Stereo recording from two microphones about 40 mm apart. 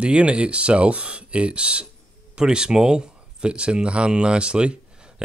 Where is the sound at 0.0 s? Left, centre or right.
Right.